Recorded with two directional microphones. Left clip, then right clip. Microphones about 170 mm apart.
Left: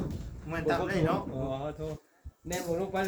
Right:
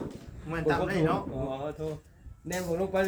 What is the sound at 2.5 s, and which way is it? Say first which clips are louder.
Speech: right 2 dB; 15° right (ahead or behind).